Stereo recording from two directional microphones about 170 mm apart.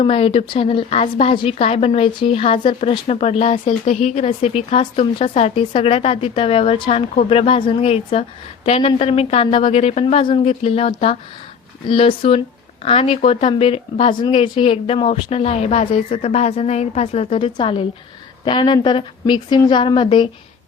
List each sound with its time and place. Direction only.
0.0 s a woman's voice: 35° left (ahead or behind)